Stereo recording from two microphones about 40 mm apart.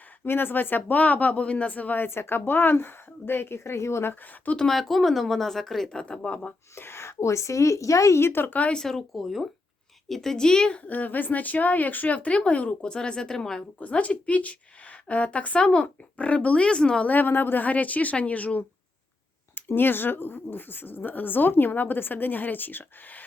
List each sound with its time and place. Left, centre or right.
0.3 s a woman's voice: left
2.0 s a woman's voice: left
4.7 s a woman's voice: centre
6.0 s speech: left
6.7 s speech: left
8.2 s speech: left
8.7 s a woman's voice: centre
9.1 s a woman's voice: centre
10.8 s a woman's voice: left
12.9 s speech: centre
13.7 s a woman's voice: left
17.1 s speech: left
17.7 s a woman's voice: left
19.5 s speech: left